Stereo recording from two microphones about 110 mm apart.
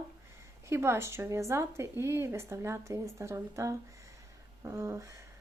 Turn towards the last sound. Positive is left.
turn(degrees=-30)  # may be behind; listen again after turning